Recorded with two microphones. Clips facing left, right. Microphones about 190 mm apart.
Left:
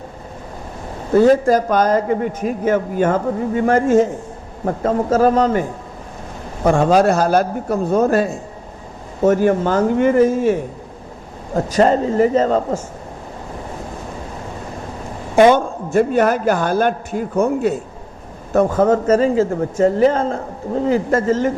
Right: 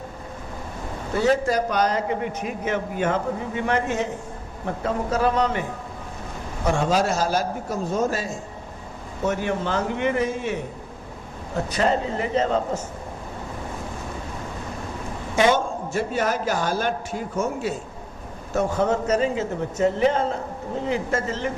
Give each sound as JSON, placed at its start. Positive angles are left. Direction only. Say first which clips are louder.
{"t": 1.2, "sound": "a man's voice", "louder": "left 7 dB", "side_deg": 50}
{"t": 6.7, "sound": "a man's voice", "louder": "left 8 dB", "side_deg": 55}
{"t": 9.2, "sound": "a man's voice", "louder": "left 10 dB", "side_deg": 45}
{"t": 15.4, "sound": "a man's voice", "louder": "left 8 dB", "side_deg": 55}